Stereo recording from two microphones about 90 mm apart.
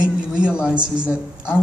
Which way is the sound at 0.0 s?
10° right (ahead or behind).